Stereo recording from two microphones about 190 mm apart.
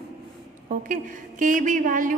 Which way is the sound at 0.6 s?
45° right (ahead or behind).